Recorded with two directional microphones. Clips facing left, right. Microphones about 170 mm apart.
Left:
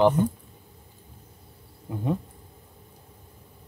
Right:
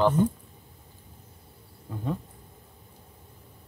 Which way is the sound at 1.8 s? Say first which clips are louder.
Left 4 dB; 15° left (ahead or behind).